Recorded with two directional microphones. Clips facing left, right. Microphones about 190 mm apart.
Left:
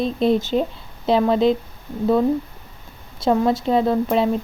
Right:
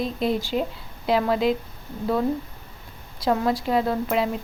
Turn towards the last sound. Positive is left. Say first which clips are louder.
# left 5 dB
turn(degrees=25)  # may be behind; listen again after turning